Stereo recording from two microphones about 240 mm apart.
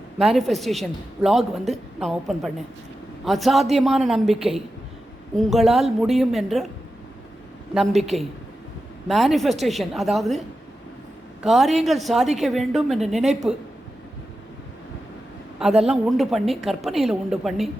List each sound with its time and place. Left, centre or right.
0.2 s a woman's voice: centre
7.7 s a woman's voice: centre
11.4 s a woman's voice: centre
15.9 s a woman's voice: centre